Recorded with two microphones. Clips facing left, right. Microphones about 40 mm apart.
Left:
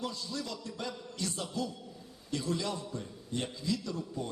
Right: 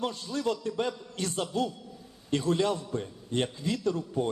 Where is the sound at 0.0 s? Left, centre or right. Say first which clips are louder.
Right 7 dB; right.